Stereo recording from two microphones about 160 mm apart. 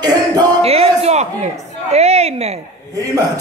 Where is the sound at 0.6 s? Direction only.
40° right (ahead or behind).